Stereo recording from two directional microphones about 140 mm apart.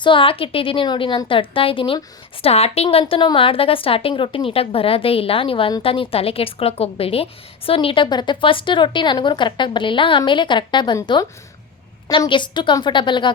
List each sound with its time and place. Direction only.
0.0 s a woman's voice: 35° left (ahead or behind)